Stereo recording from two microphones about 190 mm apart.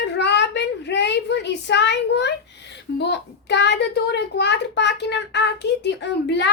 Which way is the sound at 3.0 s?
65° left (ahead or behind).